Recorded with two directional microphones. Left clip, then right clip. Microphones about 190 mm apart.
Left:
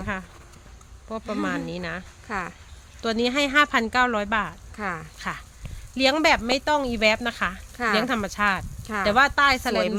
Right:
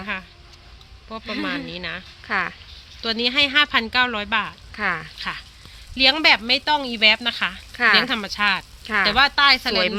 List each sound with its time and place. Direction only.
0.0 s speech: 60° left (ahead or behind)
2.2 s speech: centre (ahead or behind)
3.0 s speech: 65° left (ahead or behind)
4.7 s speech: centre (ahead or behind)
6.0 s speech: 70° left (ahead or behind)
8.8 s speech: centre (ahead or behind)
9.0 s speech: 65° left (ahead or behind)